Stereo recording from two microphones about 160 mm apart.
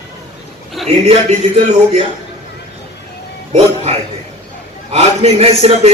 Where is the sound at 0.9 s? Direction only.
40° right (ahead or behind).